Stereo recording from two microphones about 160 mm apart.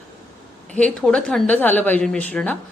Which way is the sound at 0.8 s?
5° left (ahead or behind).